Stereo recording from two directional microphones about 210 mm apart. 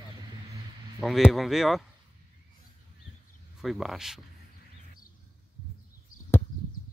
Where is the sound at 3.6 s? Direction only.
Centre (ahead or behind).